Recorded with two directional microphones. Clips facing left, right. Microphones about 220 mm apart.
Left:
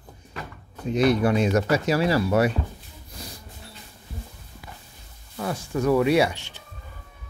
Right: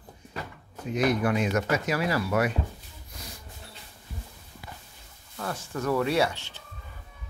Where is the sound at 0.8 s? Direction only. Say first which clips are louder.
Left 5 dB; 30° left (ahead or behind).